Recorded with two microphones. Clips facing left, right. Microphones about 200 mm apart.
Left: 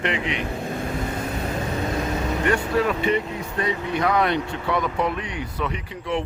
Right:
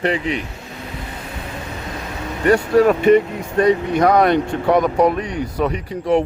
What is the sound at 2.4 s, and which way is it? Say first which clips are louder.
Speech: right 10 dB; 40° right (ahead or behind).